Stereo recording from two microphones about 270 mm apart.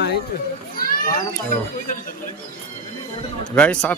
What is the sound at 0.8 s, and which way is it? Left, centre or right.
Children playing, left.